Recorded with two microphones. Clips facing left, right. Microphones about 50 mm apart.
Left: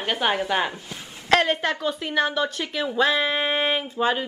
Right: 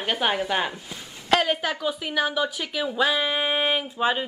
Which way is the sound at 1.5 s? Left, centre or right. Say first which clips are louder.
Left 2 dB; centre.